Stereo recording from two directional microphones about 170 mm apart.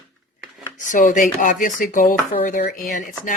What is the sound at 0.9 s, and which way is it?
Speech, 50° left (ahead or behind).